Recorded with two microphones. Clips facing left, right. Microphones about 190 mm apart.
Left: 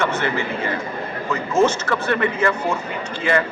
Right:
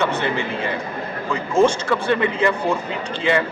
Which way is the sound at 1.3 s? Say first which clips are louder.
Right 1 dB; 15° right (ahead or behind).